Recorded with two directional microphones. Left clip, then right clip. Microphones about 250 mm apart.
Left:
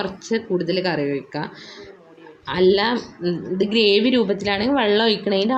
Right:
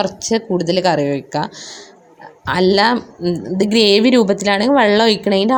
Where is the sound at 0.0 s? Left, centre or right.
Right.